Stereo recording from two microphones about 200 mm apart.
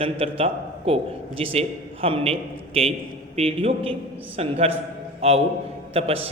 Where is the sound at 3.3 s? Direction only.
30° right (ahead or behind).